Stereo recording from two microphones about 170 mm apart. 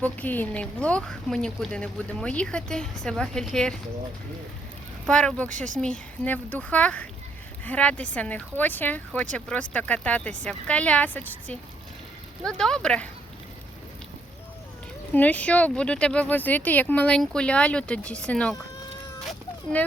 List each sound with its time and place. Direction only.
0.0 s a woman's voice: 10° left (ahead or behind)
5.0 s speech: 5° left (ahead or behind)
5.5 s speech: 45° right (ahead or behind)
5.8 s a woman's voice: 10° left (ahead or behind)
15.1 s speech: 10° left (ahead or behind)
19.2 s cat: centre (ahead or behind)